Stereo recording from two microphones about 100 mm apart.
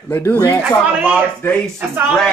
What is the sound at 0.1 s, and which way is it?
Speech, 20° left (ahead or behind).